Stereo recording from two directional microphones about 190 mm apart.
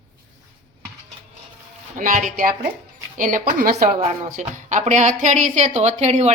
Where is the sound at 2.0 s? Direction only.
45° right (ahead or behind).